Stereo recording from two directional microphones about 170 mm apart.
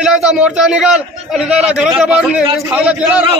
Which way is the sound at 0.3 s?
Centre (ahead or behind).